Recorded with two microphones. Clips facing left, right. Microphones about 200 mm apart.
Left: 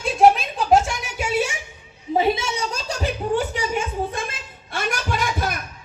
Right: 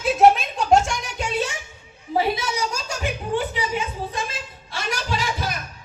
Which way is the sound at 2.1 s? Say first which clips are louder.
Left 2 dB; 25° left (ahead or behind).